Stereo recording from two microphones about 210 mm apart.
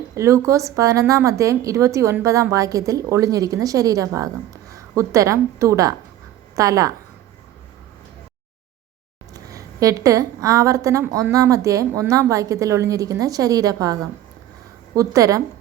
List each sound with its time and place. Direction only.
0.2 s a woman's voice: 15° right (ahead or behind)
9.3 s a woman's voice: 15° right (ahead or behind)